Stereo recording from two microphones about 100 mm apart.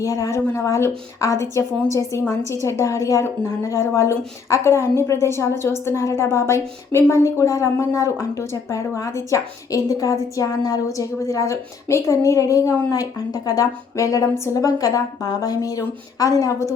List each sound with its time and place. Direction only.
0.0 s a woman's voice: 35° left (ahead or behind)